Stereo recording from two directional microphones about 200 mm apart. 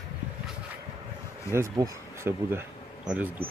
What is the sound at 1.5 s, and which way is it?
Speech, 15° right (ahead or behind).